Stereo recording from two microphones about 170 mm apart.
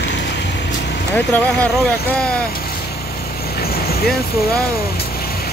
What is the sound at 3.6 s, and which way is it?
Vehicle, 65° left (ahead or behind).